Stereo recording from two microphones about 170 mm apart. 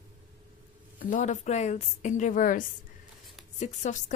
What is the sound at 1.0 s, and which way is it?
A woman's voice, 45° left (ahead or behind).